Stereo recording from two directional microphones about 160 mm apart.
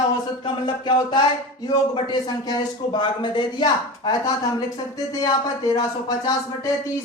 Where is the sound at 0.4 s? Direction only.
30° left (ahead or behind).